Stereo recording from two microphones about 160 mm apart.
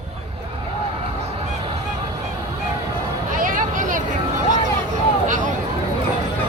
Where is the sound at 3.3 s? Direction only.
55° right (ahead or behind).